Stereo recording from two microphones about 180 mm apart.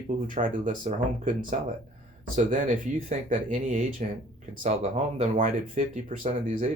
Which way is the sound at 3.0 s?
40° right (ahead or behind).